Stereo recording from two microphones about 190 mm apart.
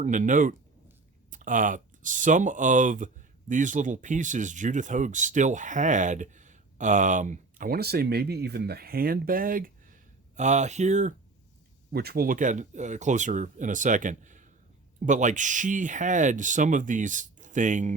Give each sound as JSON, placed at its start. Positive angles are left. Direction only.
{"t": 0.0, "sound": "speech", "side_deg": -40}
{"t": 11.9, "sound": "speech", "side_deg": -55}